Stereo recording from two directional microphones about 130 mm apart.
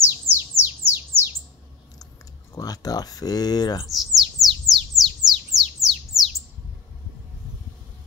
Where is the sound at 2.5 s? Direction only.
30° left (ahead or behind).